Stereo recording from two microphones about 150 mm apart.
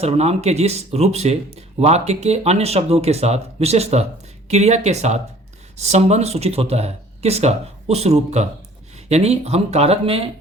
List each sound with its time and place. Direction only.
0.0 s speech: 45° right (ahead or behind)